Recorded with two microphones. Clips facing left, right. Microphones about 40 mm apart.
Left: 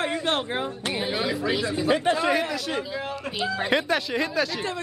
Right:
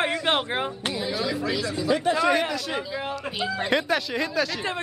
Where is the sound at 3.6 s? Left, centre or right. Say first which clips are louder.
Even; centre.